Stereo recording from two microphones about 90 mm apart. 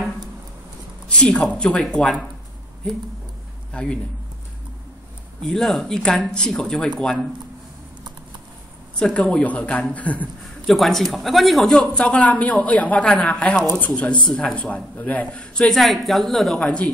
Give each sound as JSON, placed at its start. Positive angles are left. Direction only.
{"t": 1.0, "sound": "speech", "side_deg": 10}
{"t": 3.7, "sound": "speech", "side_deg": 10}
{"t": 5.4, "sound": "speech", "side_deg": 5}
{"t": 8.9, "sound": "speech", "side_deg": 10}
{"t": 10.7, "sound": "speech", "side_deg": 5}